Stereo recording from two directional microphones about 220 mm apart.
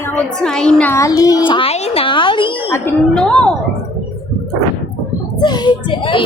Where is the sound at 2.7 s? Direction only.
10° left (ahead or behind).